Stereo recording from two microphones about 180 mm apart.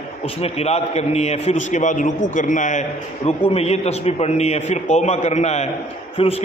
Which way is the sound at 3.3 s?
35° left (ahead or behind).